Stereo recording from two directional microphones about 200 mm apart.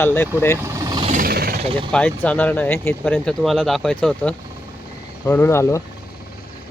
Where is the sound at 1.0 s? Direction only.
35° right (ahead or behind).